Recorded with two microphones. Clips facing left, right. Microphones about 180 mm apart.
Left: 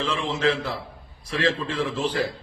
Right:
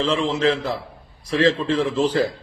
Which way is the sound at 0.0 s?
35° right (ahead or behind).